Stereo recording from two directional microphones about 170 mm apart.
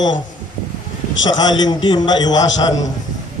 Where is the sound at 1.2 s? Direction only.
25° left (ahead or behind).